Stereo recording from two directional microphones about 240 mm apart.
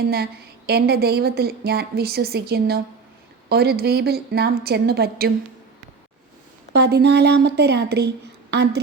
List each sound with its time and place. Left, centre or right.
0.7 s a woman's voice: right
6.7 s speech: right